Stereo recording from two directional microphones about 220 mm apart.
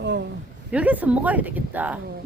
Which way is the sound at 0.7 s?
5° right (ahead or behind).